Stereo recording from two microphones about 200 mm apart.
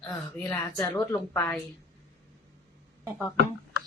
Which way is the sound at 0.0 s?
10° left (ahead or behind).